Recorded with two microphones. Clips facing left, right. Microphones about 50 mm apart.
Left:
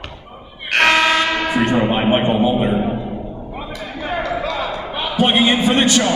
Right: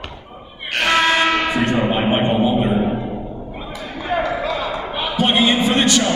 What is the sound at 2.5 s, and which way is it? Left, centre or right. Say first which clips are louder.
Music: even; centre.